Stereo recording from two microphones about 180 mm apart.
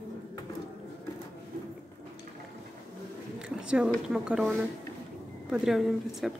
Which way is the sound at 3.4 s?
5° right (ahead or behind).